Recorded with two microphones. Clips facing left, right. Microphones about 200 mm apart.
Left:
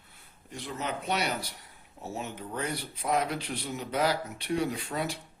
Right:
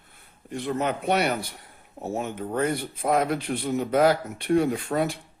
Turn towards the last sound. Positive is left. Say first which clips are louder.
# right 7 dB
turn(degrees=-50)  # may be behind; listen again after turning